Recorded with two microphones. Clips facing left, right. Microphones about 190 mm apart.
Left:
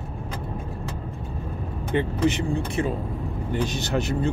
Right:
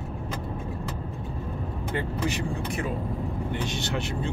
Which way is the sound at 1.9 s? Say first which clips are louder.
Left 7 dB; 25° left (ahead or behind).